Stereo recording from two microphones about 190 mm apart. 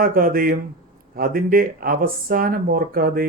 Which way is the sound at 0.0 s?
50° right (ahead or behind).